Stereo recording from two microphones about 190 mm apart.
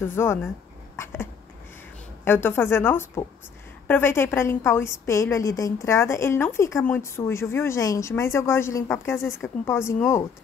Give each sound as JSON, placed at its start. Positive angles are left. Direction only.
{"t": 0.1, "sound": "a woman's voice", "side_deg": 10}
{"t": 0.9, "sound": "dog", "side_deg": 15}
{"t": 2.2, "sound": "a woman's voice", "side_deg": 10}